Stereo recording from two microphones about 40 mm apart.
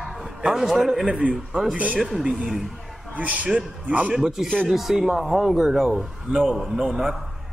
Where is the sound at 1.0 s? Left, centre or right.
Right.